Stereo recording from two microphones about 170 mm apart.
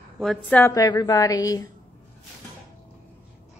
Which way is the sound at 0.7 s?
25° left (ahead or behind).